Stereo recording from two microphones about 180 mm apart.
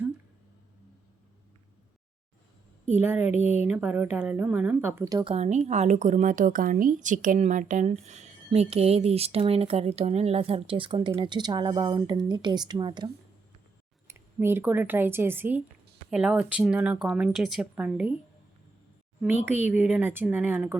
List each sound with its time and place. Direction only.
2.9 s speech: 10° right (ahead or behind)
5.3 s a woman's voice: 40° right (ahead or behind)
14.1 s speech: 10° right (ahead or behind)
19.2 s speech: 10° right (ahead or behind)